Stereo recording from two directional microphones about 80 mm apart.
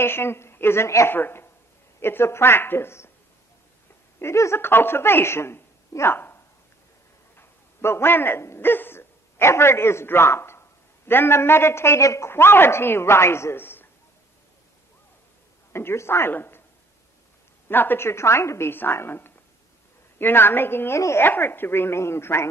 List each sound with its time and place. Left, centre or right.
0.0 s a man's voice: left
4.2 s a woman's voice: left
15.7 s a woman's voice: left
17.6 s a man's voice: left